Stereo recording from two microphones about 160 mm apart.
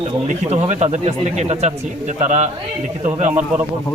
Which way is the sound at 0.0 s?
45° right (ahead or behind).